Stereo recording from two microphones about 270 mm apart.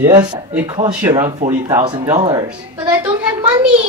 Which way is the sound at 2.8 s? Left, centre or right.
Centre.